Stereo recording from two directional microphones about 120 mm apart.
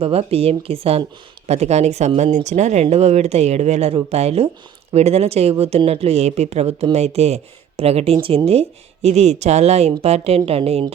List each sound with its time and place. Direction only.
0.0 s speech: 55° right (ahead or behind)